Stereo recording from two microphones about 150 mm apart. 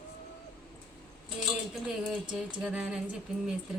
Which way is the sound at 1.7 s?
5° right (ahead or behind).